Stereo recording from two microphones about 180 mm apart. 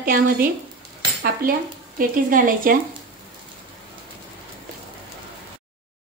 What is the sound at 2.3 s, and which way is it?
Speech, 50° right (ahead or behind).